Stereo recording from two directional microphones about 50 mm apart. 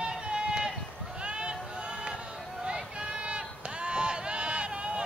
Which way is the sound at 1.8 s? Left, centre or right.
Centre.